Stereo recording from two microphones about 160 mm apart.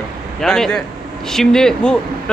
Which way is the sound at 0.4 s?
5° left (ahead or behind).